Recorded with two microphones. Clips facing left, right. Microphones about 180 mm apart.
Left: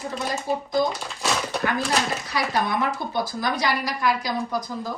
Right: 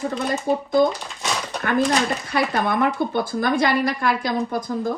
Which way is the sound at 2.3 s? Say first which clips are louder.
Right 3 dB; 55° right (ahead or behind).